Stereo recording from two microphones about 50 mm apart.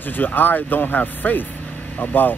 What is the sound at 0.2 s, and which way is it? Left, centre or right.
Speech, left.